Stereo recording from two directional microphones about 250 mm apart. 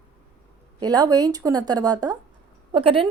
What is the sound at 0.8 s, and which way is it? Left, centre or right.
A woman's voice, centre.